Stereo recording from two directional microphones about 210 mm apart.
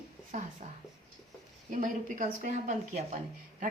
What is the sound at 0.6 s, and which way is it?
Speech, 35° right (ahead or behind).